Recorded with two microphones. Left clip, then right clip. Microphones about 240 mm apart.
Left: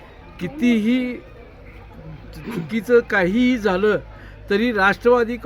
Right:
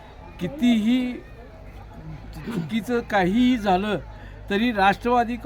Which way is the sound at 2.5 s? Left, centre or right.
Centre.